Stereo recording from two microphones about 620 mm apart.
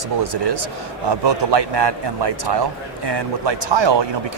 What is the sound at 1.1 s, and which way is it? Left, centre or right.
A man's voice, right.